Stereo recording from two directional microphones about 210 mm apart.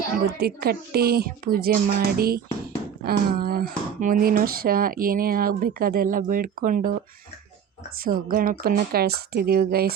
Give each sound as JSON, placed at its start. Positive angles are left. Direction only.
{"t": 0.3, "sound": "speech", "side_deg": -50}
{"t": 7.9, "sound": "speech", "side_deg": -45}